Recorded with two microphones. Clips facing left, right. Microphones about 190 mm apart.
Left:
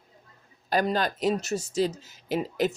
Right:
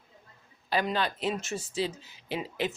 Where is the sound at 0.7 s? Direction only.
45° left (ahead or behind).